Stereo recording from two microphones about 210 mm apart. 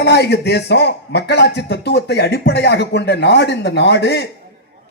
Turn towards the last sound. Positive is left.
turn(degrees=55)  # may be behind; listen again after turning